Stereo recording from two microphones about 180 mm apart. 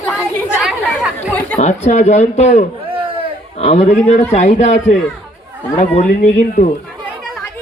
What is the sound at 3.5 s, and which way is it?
A man's voice, 40° left (ahead or behind).